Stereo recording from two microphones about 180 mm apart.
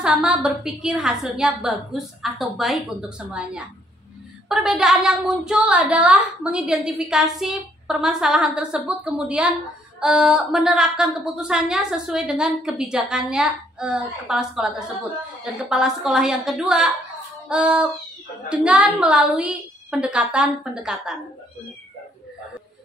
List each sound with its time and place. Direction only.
0.0 s a woman's voice: 5° right (ahead or behind)